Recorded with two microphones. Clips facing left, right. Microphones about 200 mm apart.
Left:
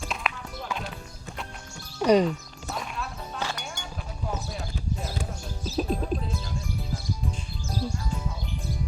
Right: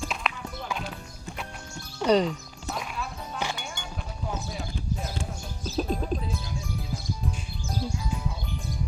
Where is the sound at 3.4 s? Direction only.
15° right (ahead or behind).